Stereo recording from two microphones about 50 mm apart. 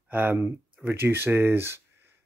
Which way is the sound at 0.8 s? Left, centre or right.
Right.